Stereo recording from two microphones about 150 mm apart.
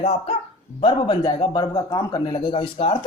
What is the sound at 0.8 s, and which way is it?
A man's voice, 35° left (ahead or behind).